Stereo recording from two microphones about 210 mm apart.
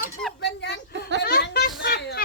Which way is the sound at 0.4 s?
55° left (ahead or behind).